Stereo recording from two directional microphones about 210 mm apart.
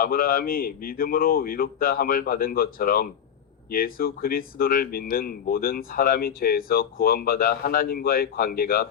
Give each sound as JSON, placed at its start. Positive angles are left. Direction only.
{"t": 0.0, "sound": "speech", "side_deg": 45}